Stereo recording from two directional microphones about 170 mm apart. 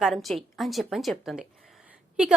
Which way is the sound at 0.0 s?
Centre (ahead or behind).